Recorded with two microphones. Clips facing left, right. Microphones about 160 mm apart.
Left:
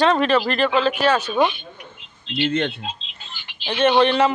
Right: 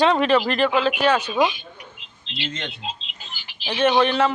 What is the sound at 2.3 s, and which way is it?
Speech, 55° left (ahead or behind).